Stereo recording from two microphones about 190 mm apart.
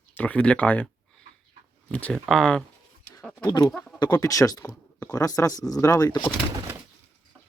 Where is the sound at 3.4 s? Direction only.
20° left (ahead or behind).